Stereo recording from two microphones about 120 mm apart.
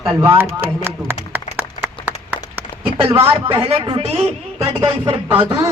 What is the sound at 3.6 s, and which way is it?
Speech, 50° right (ahead or behind).